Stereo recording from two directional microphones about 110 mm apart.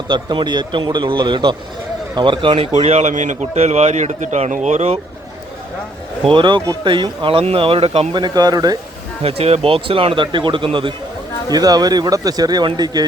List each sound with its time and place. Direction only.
0.1 s a man's voice: 45° right (ahead or behind)
2.7 s a man's voice: 85° right
6.2 s a man's voice: 50° right (ahead or behind)
8.1 s speech: 40° right (ahead or behind)
9.2 s speech: 65° right (ahead or behind)
11.5 s speech: 35° right (ahead or behind)